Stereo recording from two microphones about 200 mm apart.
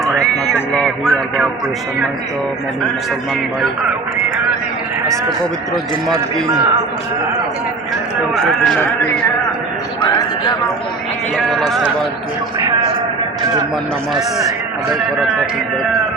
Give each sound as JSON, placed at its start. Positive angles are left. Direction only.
{"t": 0.5, "sound": "music", "side_deg": 5}
{"t": 5.7, "sound": "a man's voice", "side_deg": 0}
{"t": 8.4, "sound": "a man's voice", "side_deg": 5}
{"t": 10.0, "sound": "a sound", "side_deg": 25}
{"t": 11.3, "sound": "a man's voice", "side_deg": 0}